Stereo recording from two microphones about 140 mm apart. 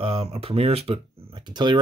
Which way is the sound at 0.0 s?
45° right (ahead or behind).